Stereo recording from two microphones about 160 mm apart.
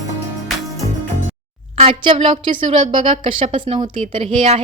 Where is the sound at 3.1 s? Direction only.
35° right (ahead or behind).